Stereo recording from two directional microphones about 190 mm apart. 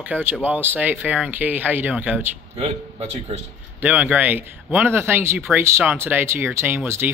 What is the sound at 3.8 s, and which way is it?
Speech, 10° right (ahead or behind).